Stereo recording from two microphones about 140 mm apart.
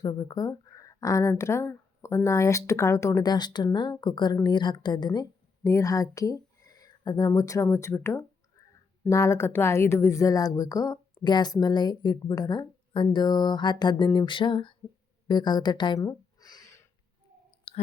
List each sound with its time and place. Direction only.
0.0 s speech: 30° left (ahead or behind)
13.1 s a sound: 30° left (ahead or behind)
17.7 s clicking: 45° left (ahead or behind)